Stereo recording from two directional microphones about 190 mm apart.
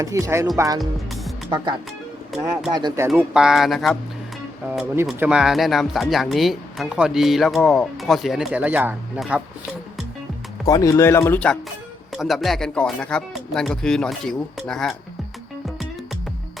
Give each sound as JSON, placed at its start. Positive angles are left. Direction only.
{"t": 0.0, "sound": "speech", "side_deg": -15}
{"t": 0.8, "sound": "music", "side_deg": 0}
{"t": 1.5, "sound": "speech", "side_deg": -25}
{"t": 2.7, "sound": "speech", "side_deg": -20}
{"t": 3.2, "sound": "speech", "side_deg": -5}
{"t": 5.0, "sound": "speech", "side_deg": -5}
{"t": 10.7, "sound": "speech", "side_deg": 20}